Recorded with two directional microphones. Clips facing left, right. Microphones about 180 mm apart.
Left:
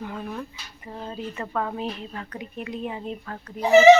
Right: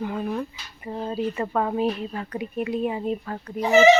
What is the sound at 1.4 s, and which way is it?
Speech, 20° right (ahead or behind).